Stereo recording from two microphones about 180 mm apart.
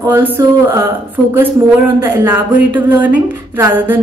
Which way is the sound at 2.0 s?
10° right (ahead or behind).